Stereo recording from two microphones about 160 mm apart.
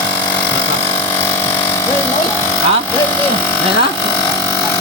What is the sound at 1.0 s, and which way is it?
Electric shaver, 15° left (ahead or behind).